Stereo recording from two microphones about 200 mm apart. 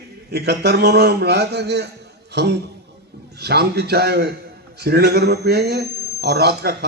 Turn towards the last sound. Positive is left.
turn(degrees=-55)  # may be behind; listen again after turning